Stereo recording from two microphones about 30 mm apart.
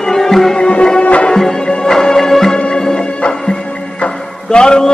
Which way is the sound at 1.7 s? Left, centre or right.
Centre.